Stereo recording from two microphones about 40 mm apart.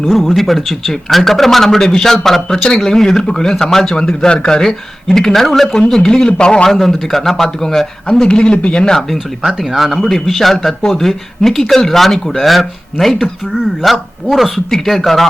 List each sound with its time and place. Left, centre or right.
0.0 s a man's voice: centre
3.9 s a man's voice: left
6.7 s a man's voice: centre
9.4 s speech: centre